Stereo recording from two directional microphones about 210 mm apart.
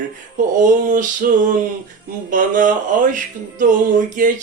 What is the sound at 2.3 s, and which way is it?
Speech, 40° right (ahead or behind).